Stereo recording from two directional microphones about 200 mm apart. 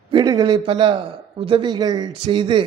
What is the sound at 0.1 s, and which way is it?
A man's voice, 20° right (ahead or behind).